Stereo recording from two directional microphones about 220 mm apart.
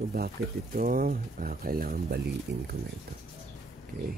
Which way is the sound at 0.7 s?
40° right (ahead or behind).